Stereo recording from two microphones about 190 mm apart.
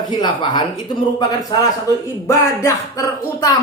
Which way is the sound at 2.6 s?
15° left (ahead or behind).